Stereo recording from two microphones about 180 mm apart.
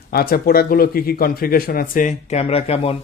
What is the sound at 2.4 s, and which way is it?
Speech, 35° left (ahead or behind).